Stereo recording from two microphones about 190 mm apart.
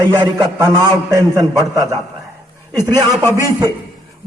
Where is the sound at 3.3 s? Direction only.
20° right (ahead or behind).